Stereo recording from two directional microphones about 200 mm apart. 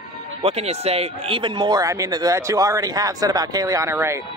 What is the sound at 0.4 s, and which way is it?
Speech, 30° right (ahead or behind).